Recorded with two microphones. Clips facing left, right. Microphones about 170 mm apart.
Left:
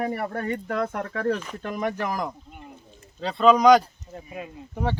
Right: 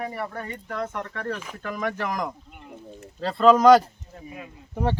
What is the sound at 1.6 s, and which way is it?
Speech, 30° left (ahead or behind).